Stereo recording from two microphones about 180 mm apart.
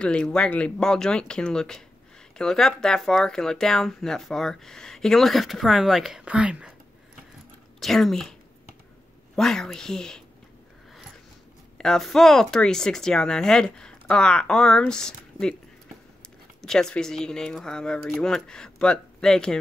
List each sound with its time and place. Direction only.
0.0 s speech: 5° left (ahead or behind)
7.8 s speech: centre (ahead or behind)
11.8 s speech: centre (ahead or behind)
16.6 s speech: 5° left (ahead or behind)